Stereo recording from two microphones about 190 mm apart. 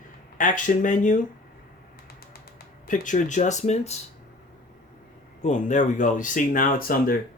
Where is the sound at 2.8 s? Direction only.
40° left (ahead or behind).